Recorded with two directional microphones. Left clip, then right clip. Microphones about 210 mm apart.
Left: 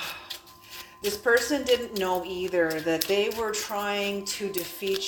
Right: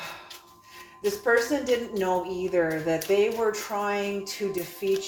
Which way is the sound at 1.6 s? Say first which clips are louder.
Left 1 dB; 50° left (ahead or behind).